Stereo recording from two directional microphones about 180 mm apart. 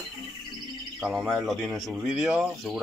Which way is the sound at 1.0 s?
Centre (ahead or behind).